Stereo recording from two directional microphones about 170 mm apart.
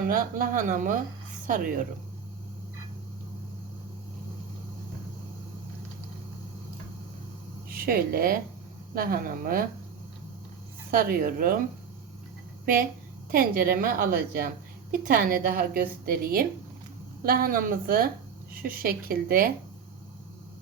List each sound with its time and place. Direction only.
0.1 s speech: 55° right (ahead or behind)
7.7 s a woman's voice: 60° right (ahead or behind)
10.9 s a woman's voice: 60° right (ahead or behind)
12.6 s a woman's voice: 60° right (ahead or behind)